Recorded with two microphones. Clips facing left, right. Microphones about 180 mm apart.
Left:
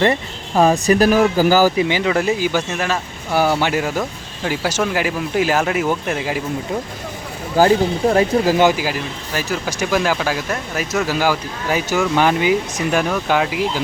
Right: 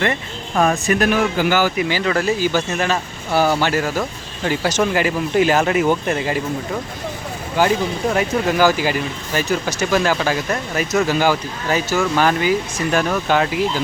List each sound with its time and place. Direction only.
0.0 s speech: 30° left (ahead or behind); by 6.4 s 5° left (ahead or behind)
7.6 s speech: 40° left (ahead or behind)
8.8 s speech: 5° left (ahead or behind)